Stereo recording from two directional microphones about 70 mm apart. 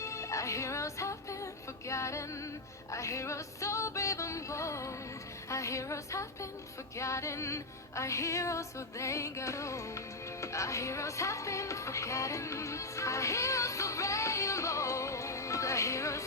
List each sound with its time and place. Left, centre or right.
0.0 s music: left